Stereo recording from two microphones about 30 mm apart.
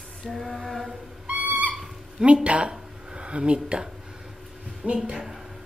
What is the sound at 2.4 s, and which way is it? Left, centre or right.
A woman's voice, right.